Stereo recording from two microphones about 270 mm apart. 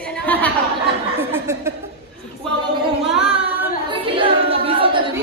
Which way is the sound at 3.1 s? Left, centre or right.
Centre.